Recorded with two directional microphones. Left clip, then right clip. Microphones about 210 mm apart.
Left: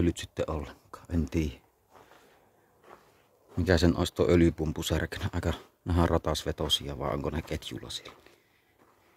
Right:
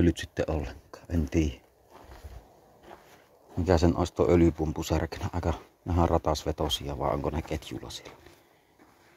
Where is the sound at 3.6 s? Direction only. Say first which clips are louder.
Right 1 dB; 20° left (ahead or behind).